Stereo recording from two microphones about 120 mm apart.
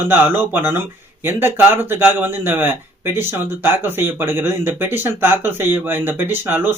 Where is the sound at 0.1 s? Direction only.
20° right (ahead or behind).